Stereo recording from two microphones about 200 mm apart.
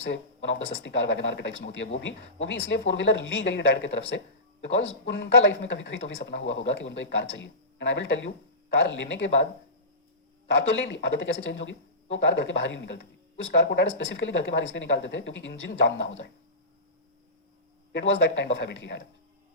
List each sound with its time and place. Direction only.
0.7 s speech: 60° left (ahead or behind)
17.9 s speech: 65° left (ahead or behind)